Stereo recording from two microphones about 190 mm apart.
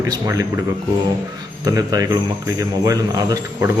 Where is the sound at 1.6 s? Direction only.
20° right (ahead or behind).